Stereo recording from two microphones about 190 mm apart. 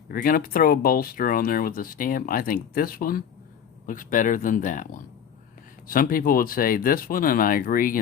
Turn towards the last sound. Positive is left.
turn(degrees=45)  # may be behind; listen again after turning